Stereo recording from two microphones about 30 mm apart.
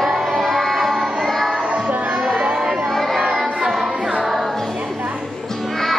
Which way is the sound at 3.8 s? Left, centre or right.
Right.